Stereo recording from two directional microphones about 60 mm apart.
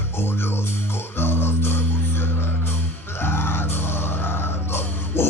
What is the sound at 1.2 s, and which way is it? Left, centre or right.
Music, left.